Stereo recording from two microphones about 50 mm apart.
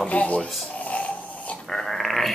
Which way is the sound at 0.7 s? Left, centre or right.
Left.